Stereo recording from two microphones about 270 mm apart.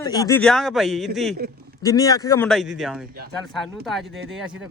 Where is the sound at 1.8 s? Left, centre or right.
Centre.